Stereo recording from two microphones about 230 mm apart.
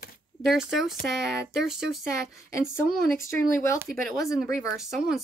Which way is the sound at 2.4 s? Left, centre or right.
Centre.